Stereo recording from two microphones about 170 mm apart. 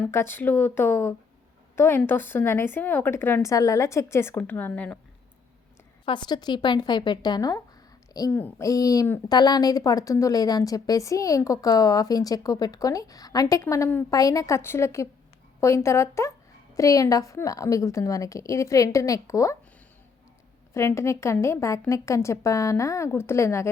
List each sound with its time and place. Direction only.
0.0 s a woman's voice: 15° left (ahead or behind)
6.1 s a woman's voice: 25° left (ahead or behind)
20.7 s a woman's voice: 15° left (ahead or behind)